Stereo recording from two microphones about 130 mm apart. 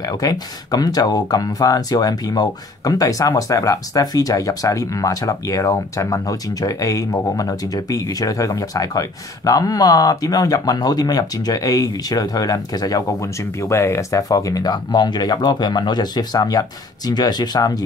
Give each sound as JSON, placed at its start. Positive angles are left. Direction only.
{"t": 0.0, "sound": "speech", "side_deg": 30}